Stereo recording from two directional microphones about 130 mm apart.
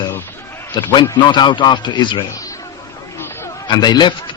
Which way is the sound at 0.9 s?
35° left (ahead or behind).